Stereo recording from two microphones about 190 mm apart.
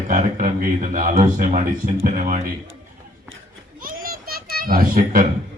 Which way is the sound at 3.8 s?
50° right (ahead or behind).